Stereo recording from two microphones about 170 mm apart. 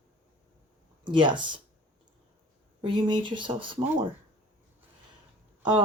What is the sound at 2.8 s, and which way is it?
Speech, 30° right (ahead or behind).